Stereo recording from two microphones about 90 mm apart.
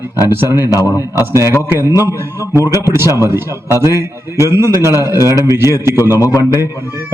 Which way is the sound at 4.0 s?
30° right (ahead or behind).